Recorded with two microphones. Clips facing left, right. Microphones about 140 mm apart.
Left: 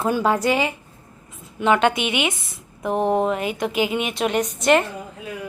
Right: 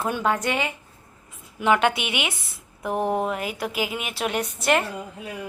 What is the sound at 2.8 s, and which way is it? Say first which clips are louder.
Speech: left 4 dB; 20° left (ahead or behind).